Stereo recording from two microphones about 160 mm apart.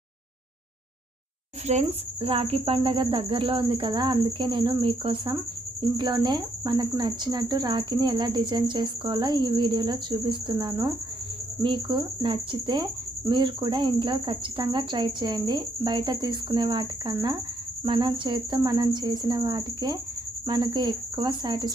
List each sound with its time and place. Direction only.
1.6 s speech: 40° right (ahead or behind)